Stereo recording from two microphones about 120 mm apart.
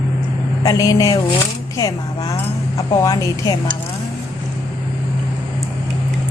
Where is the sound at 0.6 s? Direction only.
30° left (ahead or behind).